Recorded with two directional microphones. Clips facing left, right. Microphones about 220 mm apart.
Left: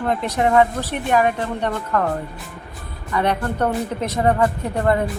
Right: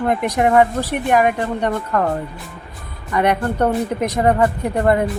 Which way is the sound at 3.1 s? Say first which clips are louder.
Right 3 dB; 15° right (ahead or behind).